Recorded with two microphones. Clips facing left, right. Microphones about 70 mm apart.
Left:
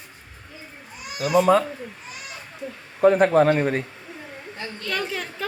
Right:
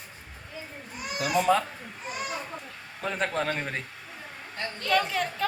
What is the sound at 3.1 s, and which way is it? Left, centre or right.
A woman's voice, centre.